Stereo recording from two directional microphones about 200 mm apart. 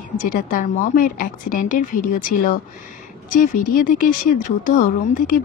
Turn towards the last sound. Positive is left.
turn(degrees=40)  # may be behind; listen again after turning